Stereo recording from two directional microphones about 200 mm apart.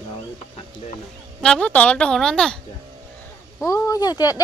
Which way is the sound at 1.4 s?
5° left (ahead or behind).